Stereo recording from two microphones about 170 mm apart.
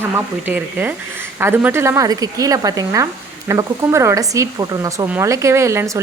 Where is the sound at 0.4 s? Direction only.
10° right (ahead or behind).